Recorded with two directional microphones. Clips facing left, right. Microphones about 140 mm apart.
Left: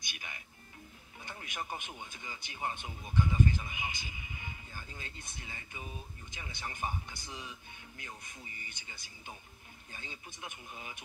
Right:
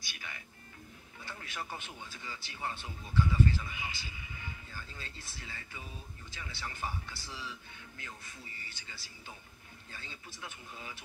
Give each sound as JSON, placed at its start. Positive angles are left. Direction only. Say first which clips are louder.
{"t": 0.0, "sound": "speech", "louder": "right 1 dB", "side_deg": 20}